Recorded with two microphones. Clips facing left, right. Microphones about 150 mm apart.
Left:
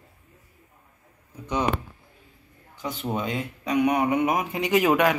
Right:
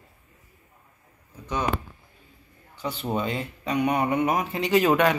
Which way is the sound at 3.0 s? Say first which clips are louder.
Even; 5° left (ahead or behind).